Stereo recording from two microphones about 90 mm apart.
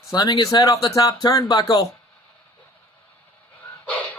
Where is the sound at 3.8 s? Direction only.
15° left (ahead or behind).